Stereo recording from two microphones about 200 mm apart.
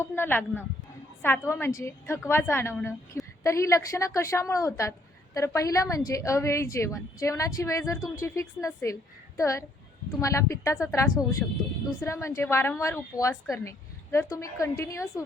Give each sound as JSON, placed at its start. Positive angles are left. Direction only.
{"t": 0.0, "sound": "a woman's voice", "side_deg": 10}